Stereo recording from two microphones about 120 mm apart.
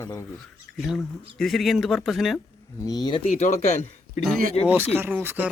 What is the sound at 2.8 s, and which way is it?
Speech, 35° left (ahead or behind).